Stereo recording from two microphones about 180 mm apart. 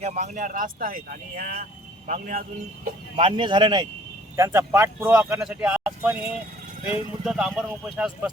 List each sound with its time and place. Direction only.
0.0 s speech: 40° right (ahead or behind)
3.2 s speech: 30° right (ahead or behind); by 6.1 s 5° right (ahead or behind)
7.3 s speech: centre (ahead or behind)